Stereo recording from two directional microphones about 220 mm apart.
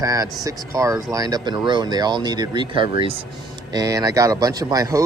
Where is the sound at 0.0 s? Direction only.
15° right (ahead or behind).